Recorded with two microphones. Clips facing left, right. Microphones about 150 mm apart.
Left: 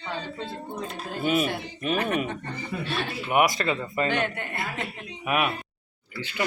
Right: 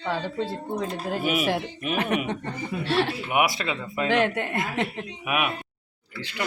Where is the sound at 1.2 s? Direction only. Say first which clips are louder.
Left 3 dB; 10° right (ahead or behind).